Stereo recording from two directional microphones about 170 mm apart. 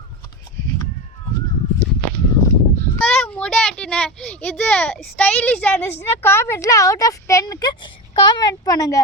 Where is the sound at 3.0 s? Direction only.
5° left (ahead or behind).